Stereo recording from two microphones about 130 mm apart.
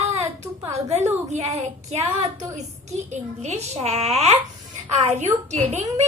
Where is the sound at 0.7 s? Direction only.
55° right (ahead or behind).